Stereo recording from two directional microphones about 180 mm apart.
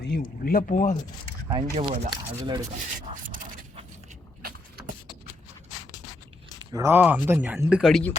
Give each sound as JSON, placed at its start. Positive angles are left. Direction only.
{"t": 0.1, "sound": "speech", "side_deg": 55}
{"t": 1.5, "sound": "speech", "side_deg": -30}
{"t": 6.6, "sound": "speech", "side_deg": -15}